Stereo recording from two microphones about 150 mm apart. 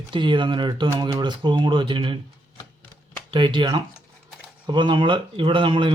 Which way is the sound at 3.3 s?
30° right (ahead or behind).